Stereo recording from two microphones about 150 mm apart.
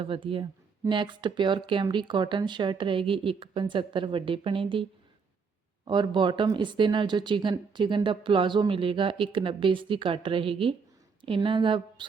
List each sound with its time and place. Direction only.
0.0 s speech: 35° right (ahead or behind)